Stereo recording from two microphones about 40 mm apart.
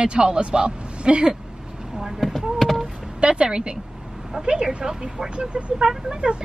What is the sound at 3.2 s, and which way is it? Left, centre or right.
A woman's voice, right.